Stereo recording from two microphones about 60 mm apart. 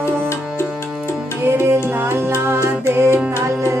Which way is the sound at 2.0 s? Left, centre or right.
Right.